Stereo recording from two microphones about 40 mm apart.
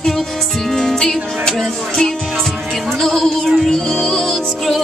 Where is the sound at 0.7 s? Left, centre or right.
Centre.